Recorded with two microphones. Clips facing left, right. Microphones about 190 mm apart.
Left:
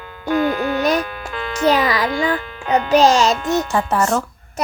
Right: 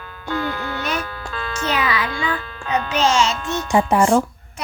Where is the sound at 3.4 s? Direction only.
15° left (ahead or behind).